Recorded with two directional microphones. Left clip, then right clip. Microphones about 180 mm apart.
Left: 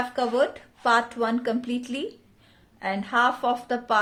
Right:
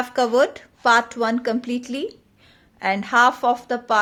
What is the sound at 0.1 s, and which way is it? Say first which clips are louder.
A woman's voice: right 8 dB; 40° right (ahead or behind).